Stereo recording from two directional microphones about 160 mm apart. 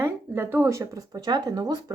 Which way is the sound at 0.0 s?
15° right (ahead or behind).